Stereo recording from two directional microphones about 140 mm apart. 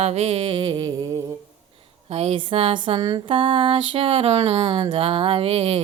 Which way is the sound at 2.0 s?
45° right (ahead or behind).